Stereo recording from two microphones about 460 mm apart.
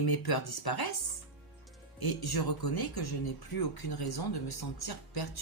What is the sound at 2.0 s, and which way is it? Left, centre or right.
Speech, left.